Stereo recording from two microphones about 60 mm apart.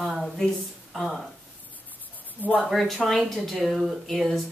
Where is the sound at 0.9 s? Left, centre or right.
Centre.